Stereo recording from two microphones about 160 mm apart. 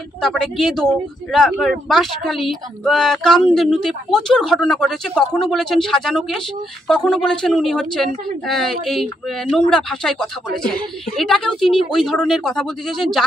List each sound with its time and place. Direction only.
0.2 s speech: centre (ahead or behind)